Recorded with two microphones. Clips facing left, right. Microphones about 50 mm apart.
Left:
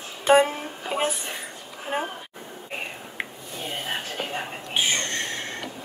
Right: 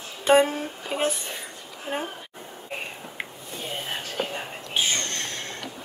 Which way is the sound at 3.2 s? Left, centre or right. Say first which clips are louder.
Left 3 dB; centre.